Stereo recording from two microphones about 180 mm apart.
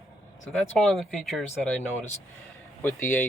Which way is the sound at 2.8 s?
10° left (ahead or behind).